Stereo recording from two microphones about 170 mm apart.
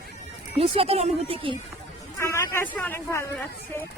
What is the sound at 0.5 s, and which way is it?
A woman's voice, 35° right (ahead or behind).